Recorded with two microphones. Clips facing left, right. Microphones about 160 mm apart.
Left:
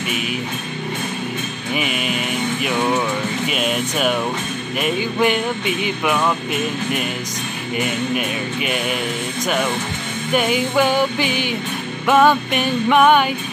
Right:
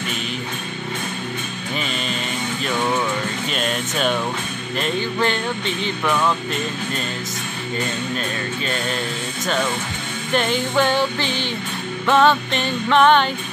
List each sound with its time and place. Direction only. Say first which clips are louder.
1.8 s music: left 4 dB; 10° left (ahead or behind)
10.3 s music: left 2 dB; 10° left (ahead or behind)